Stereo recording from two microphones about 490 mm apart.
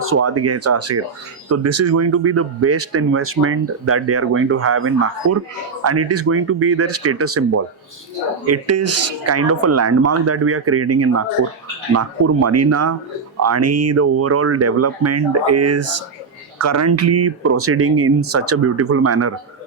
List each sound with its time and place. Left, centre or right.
0.0 s speech: right